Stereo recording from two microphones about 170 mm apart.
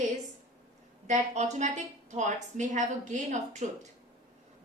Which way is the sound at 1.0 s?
45° right (ahead or behind).